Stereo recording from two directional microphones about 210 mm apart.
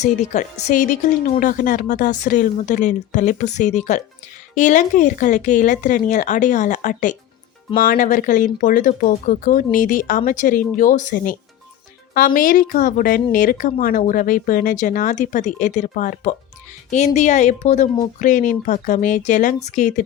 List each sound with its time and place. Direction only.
0.0 s speech: 35° left (ahead or behind)